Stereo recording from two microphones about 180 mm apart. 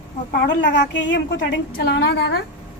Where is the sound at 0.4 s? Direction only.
75° left (ahead or behind).